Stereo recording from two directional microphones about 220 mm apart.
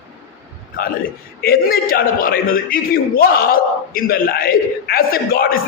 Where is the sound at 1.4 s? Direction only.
45° left (ahead or behind).